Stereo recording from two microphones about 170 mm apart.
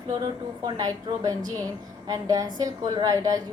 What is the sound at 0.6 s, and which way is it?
A woman's voice, 20° right (ahead or behind).